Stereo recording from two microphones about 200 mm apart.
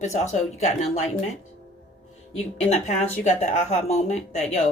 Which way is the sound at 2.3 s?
35° left (ahead or behind).